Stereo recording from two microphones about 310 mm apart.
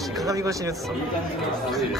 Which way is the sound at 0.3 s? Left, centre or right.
Centre.